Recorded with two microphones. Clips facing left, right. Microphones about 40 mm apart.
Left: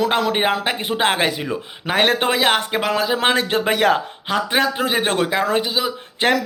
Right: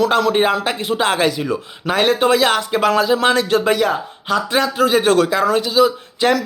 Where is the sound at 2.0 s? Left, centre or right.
Left.